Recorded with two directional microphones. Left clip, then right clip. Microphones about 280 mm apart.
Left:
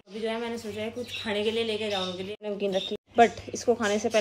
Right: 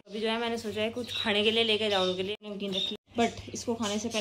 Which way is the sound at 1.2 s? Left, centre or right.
Right.